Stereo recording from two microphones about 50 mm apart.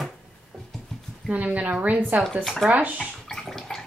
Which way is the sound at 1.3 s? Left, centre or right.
Right.